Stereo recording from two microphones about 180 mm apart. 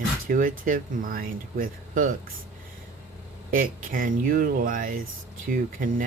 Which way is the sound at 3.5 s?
50° right (ahead or behind).